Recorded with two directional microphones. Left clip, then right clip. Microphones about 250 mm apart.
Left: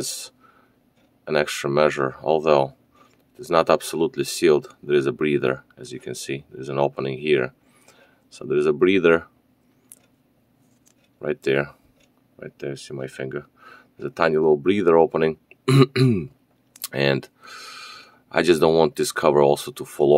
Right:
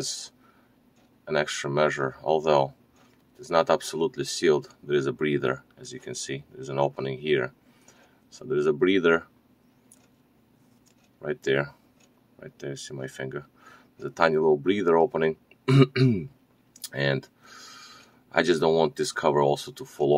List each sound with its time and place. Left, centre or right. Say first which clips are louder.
0.0 s speech: left 2 dB; left
11.1 s speech: left 4 dB; left